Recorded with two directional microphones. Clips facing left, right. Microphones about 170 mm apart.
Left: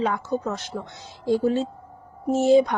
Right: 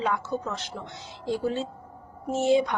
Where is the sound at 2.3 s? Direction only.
40° left (ahead or behind).